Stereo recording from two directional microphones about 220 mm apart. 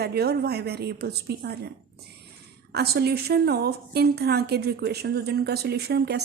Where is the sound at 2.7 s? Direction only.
45° right (ahead or behind).